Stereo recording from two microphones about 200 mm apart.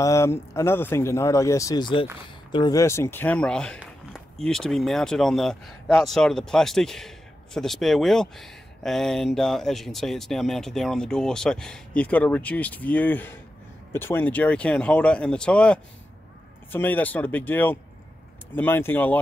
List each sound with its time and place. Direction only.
0.0 s speech: 15° left (ahead or behind)